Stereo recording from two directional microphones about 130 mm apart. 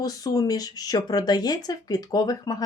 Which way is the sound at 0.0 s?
30° left (ahead or behind).